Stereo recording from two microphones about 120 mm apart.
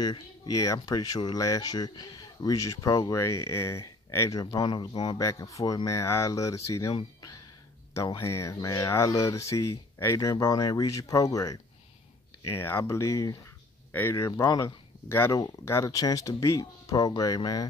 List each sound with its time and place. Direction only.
0.0 s speech: 30° left (ahead or behind)
5.2 s speech: 25° left (ahead or behind)
8.2 s speech: 25° left (ahead or behind)